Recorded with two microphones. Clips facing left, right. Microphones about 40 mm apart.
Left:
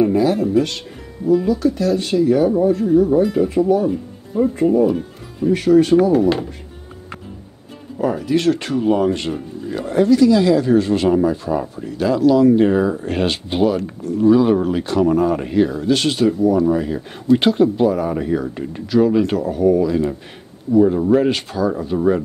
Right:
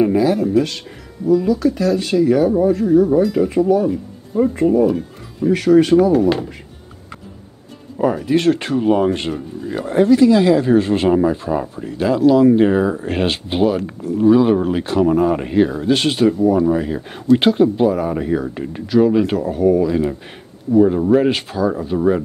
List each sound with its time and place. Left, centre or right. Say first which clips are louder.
0.2 s speech: right 1 dB; centre
8.0 s speech: right 2 dB; right; by 22.2 s centre